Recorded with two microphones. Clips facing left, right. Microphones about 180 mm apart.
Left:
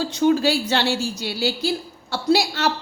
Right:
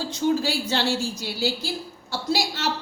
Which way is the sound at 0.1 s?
65° left (ahead or behind).